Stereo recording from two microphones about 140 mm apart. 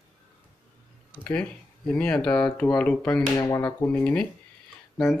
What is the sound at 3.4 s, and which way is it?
Speech, 25° left (ahead or behind).